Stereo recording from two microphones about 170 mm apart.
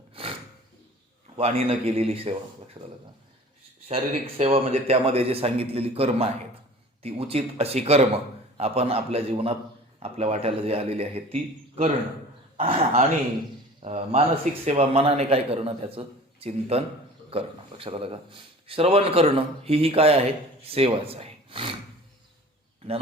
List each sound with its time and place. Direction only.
0.1 s a sound: 35° right (ahead or behind)
1.4 s a man's voice: 35° right (ahead or behind)
12.5 s a man's voice: 35° right (ahead or behind)